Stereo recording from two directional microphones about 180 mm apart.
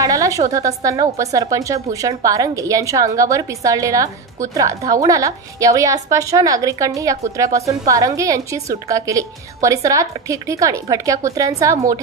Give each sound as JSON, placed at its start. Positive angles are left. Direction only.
{"t": 0.0, "sound": "a woman's voice", "side_deg": -20}